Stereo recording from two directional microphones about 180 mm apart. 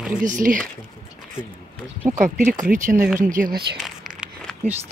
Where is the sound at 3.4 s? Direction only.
5° right (ahead or behind).